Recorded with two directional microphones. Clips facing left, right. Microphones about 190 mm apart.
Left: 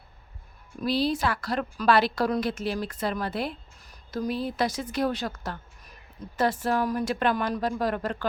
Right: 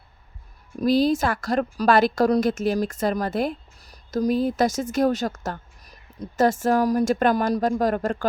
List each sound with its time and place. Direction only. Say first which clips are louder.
0.8 s a woman's voice: right 6 dB; 45° right (ahead or behind)